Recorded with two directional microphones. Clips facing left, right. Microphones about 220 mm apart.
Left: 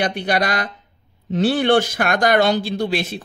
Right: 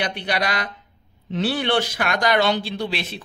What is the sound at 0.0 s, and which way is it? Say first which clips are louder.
A man's voice: left 4 dB; 45° left (ahead or behind).